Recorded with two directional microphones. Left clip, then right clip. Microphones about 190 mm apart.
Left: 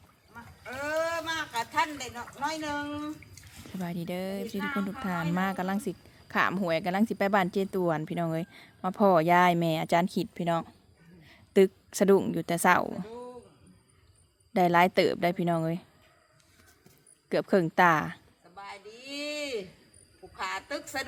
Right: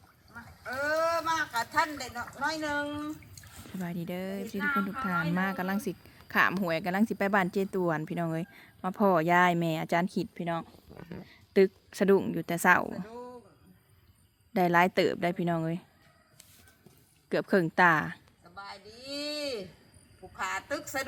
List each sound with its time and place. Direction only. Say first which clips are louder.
0.3 s a sound: right 3 dB; centre (ahead or behind)
3.6 s speech: left 2 dB; 5° left (ahead or behind)
10.3 s a woman's voice: left 4 dB; 25° left (ahead or behind); by 13.3 s centre (ahead or behind)
14.5 s speech: left 2 dB; 5° left (ahead or behind)
17.2 s bleat: left 1 dB; centre (ahead or behind)
20.3 s a woman's voice: right 1 dB; centre (ahead or behind)